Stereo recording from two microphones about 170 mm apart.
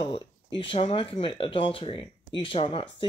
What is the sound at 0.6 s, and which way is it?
Speech, 30° left (ahead or behind).